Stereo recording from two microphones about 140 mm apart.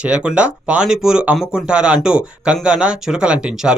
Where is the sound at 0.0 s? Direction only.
5° right (ahead or behind).